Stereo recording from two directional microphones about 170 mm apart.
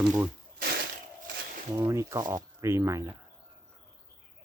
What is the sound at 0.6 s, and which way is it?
Crushing, 75° right (ahead or behind).